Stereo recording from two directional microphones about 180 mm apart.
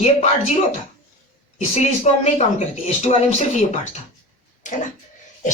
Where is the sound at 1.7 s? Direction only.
35° left (ahead or behind).